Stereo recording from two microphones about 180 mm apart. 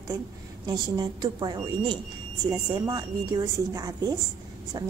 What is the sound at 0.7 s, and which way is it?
A woman's voice, 20° right (ahead or behind).